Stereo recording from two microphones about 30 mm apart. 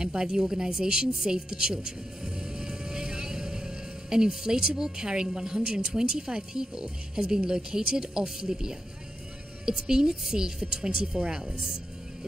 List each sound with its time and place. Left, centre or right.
0.0 s a woman's voice: right